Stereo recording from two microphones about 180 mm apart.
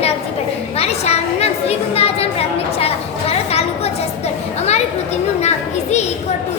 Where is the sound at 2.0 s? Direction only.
35° left (ahead or behind).